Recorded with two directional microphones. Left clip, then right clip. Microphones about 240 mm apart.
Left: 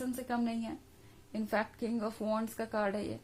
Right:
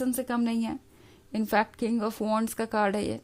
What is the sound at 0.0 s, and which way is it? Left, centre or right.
A woman's voice, right.